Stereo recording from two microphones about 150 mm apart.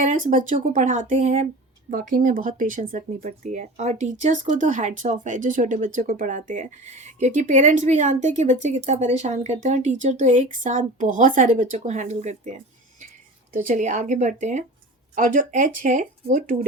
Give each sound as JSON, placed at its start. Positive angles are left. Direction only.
{"t": 0.0, "sound": "speech", "side_deg": -55}
{"t": 1.9, "sound": "a woman's voice", "side_deg": -65}
{"t": 13.5, "sound": "speech", "side_deg": -60}